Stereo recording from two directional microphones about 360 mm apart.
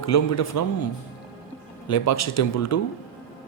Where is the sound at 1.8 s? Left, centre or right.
Left.